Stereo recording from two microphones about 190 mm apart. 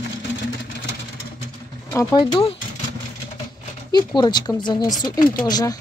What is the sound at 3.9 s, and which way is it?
Speech, 20° left (ahead or behind).